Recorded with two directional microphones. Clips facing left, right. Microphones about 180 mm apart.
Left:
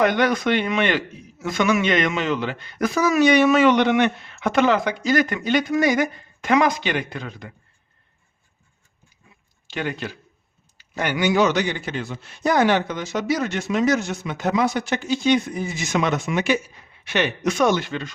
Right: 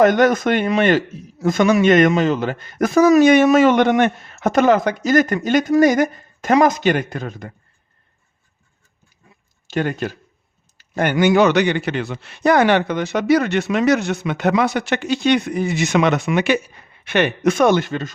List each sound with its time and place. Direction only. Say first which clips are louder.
0.0 s a man's voice: right 5 dB; 45° right (ahead or behind)
9.6 s a man's voice: right 6 dB; 45° right (ahead or behind)